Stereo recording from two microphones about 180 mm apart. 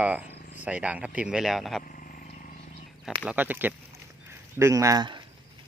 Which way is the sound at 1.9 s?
50° left (ahead or behind).